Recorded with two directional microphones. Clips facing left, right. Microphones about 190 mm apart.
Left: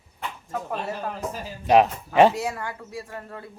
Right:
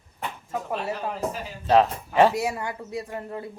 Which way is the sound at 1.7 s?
15° left (ahead or behind).